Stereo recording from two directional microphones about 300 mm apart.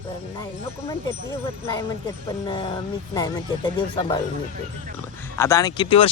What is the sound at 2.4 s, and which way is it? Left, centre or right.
Speech, centre.